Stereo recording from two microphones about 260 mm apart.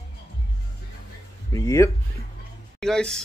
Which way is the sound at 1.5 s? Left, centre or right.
Centre.